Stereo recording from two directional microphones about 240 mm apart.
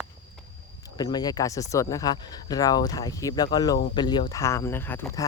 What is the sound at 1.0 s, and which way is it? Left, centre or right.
Speech, centre.